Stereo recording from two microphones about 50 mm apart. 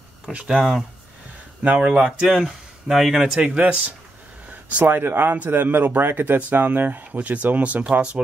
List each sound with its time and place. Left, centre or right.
0.5 s speech: centre
1.6 s speech: right
2.0 s speech: centre
3.3 s speech: right
4.8 s speech: right